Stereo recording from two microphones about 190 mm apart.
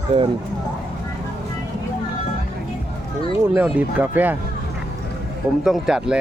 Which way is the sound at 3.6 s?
5° right (ahead or behind).